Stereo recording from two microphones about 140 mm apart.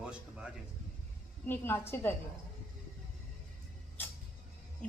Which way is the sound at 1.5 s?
15° left (ahead or behind).